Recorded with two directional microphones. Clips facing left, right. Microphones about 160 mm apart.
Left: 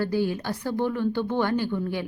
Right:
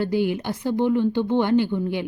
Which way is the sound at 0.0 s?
20° right (ahead or behind).